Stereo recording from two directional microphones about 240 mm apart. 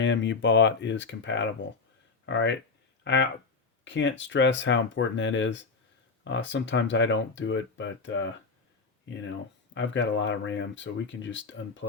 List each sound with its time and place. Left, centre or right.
0.0 s speech: left